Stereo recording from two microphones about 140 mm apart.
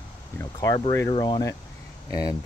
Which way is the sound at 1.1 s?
35° left (ahead or behind).